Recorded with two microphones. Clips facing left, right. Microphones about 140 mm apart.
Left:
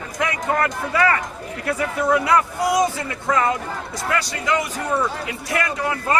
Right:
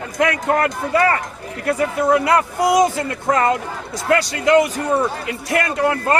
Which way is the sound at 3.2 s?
40° right (ahead or behind).